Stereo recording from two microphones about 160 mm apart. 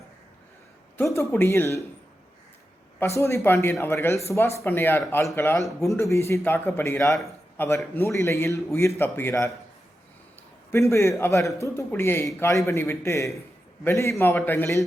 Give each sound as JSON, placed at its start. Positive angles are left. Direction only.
{"t": 0.9, "sound": "a man's voice", "side_deg": 15}
{"t": 3.0, "sound": "a man's voice", "side_deg": 15}
{"t": 10.7, "sound": "a man's voice", "side_deg": 20}